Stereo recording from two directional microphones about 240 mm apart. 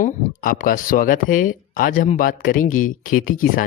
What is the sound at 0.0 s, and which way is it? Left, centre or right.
Speech, left.